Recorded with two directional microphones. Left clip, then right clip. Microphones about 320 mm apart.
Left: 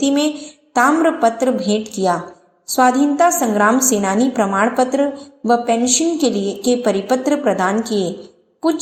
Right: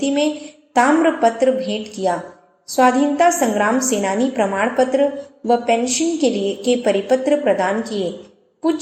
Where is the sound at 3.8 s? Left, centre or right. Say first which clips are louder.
Left 2 dB; left.